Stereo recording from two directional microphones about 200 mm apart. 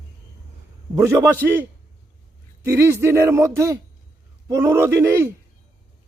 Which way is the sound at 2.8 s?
10° right (ahead or behind).